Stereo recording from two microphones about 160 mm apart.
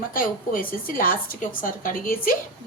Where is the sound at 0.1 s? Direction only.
60° left (ahead or behind).